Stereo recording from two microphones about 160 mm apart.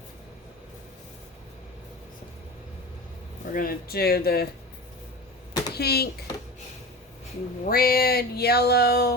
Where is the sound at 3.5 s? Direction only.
70° left (ahead or behind).